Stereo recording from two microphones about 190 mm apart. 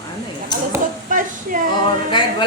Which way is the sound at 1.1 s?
45° right (ahead or behind).